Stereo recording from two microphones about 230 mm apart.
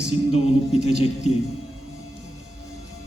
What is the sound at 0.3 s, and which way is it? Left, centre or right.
Speech, left.